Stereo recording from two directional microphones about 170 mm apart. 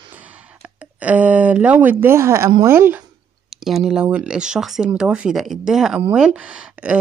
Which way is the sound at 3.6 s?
Centre (ahead or behind).